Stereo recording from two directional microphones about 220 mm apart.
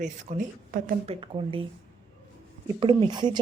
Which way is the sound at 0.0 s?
35° right (ahead or behind).